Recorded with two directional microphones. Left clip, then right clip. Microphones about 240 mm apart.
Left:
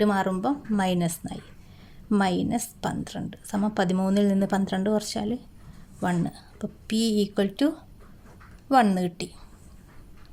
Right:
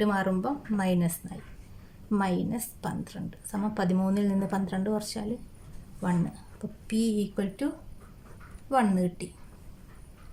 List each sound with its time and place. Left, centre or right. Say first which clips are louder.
0.0 s a woman's voice: left 4 dB; left
8.7 s speech: left 5 dB; left